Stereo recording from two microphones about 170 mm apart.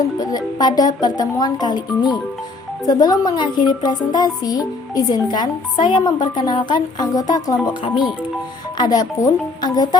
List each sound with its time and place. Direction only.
0.0 s speech: 20° left (ahead or behind)